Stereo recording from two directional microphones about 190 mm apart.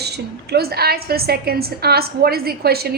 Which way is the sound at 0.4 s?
55° right (ahead or behind).